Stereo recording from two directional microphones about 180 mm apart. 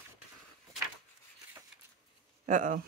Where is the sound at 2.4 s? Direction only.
45° right (ahead or behind).